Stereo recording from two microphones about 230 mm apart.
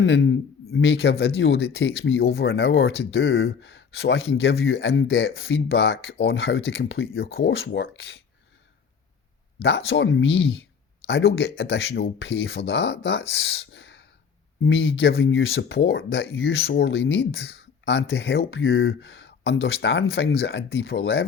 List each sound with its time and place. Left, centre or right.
0.0 s a man's voice: left
9.6 s a man's voice: left